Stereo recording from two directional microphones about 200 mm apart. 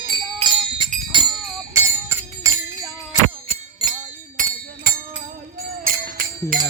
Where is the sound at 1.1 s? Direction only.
25° right (ahead or behind).